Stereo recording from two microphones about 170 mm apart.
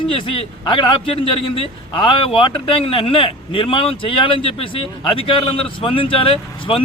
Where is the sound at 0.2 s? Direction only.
30° left (ahead or behind).